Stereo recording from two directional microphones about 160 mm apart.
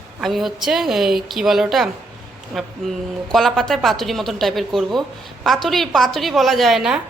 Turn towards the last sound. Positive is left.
turn(degrees=0)  # may be behind; listen again after turning